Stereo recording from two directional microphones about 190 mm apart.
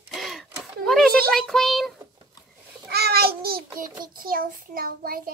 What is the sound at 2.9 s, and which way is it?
A child's voice, 55° right (ahead or behind).